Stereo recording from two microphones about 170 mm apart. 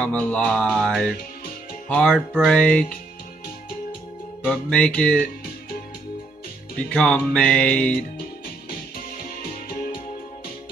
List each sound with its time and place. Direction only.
0.0 s music: 10° left (ahead or behind)
2.1 s music: 5° right (ahead or behind)
2.5 s music: 5° left (ahead or behind)
4.5 s music: 5° left (ahead or behind)
6.9 s music: 5° left (ahead or behind)
8.6 s music: 60° left (ahead or behind)